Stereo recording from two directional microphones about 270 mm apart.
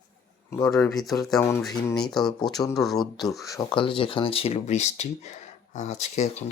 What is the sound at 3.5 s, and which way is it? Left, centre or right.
Speech, centre.